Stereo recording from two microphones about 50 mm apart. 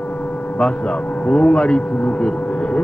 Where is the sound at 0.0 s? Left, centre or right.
Left.